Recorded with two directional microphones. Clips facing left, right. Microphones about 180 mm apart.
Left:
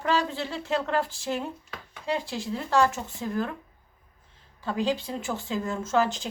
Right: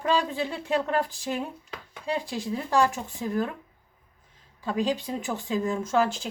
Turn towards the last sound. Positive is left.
turn(degrees=-10)  # may be behind; listen again after turning